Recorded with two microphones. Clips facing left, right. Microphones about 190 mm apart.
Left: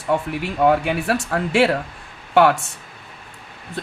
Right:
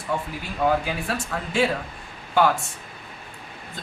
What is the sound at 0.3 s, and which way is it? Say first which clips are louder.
Speech: left 5 dB; 65° left (ahead or behind).